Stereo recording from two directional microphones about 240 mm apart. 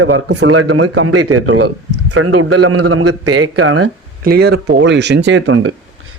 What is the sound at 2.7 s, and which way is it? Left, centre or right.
A man's voice, right.